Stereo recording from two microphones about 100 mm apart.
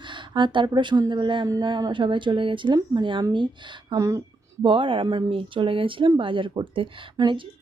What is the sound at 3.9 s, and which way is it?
Speech, 35° right (ahead or behind).